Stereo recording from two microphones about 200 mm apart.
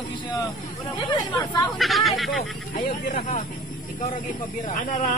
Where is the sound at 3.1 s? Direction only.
40° left (ahead or behind).